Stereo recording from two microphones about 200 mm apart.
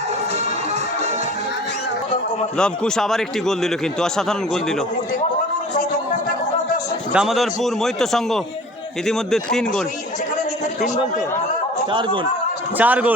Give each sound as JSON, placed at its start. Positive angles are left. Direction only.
{"t": 2.6, "sound": "a man's voice", "side_deg": 5}
{"t": 7.1, "sound": "a man's voice", "side_deg": -5}
{"t": 10.3, "sound": "a sound", "side_deg": 40}
{"t": 11.9, "sound": "a man's voice", "side_deg": -25}
{"t": 12.7, "sound": "a man's voice", "side_deg": -10}